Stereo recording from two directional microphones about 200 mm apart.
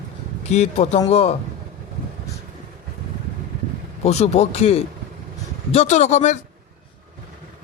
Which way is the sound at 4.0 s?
35° left (ahead or behind).